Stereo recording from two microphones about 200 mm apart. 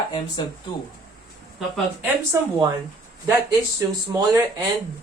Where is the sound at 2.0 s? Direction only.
15° right (ahead or behind).